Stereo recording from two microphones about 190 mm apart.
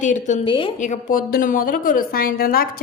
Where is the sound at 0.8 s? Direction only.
45° left (ahead or behind).